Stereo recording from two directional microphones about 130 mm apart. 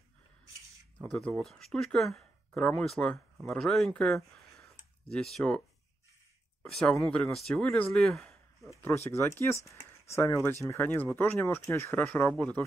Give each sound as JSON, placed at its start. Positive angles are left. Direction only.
{"t": 0.9, "sound": "speech", "side_deg": 5}
{"t": 6.6, "sound": "speech", "side_deg": 5}
{"t": 8.6, "sound": "speech", "side_deg": 20}